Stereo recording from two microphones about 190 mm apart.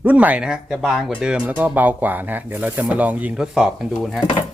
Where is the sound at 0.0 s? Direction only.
10° right (ahead or behind).